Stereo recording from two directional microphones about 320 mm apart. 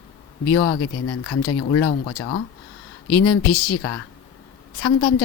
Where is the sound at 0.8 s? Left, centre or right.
Left.